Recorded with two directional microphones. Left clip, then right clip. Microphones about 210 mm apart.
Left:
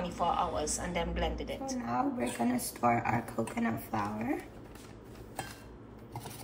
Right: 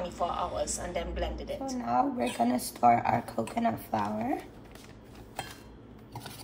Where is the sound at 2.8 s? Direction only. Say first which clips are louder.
Right 6 dB; 50° right (ahead or behind).